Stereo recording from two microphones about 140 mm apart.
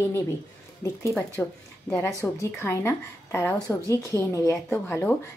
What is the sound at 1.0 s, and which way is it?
Speech, 15° left (ahead or behind).